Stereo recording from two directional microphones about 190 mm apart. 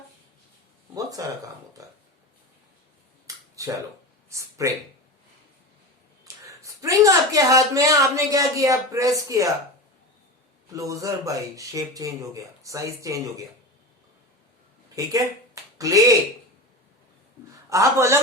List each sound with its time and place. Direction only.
1.2 s speech: 20° right (ahead or behind)
1.8 s a sound: 15° right (ahead or behind)
3.2 s finger snapping: 15° right (ahead or behind)
4.3 s speech: 15° right (ahead or behind)
6.2 s a sound: 15° right (ahead or behind)
8.1 s speech: 15° right (ahead or behind)
10.7 s speech: 15° right (ahead or behind)
15.0 s speech: 15° right (ahead or behind)
17.7 s speech: 15° right (ahead or behind)